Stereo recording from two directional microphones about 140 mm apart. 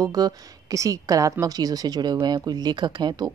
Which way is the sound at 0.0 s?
25° right (ahead or behind).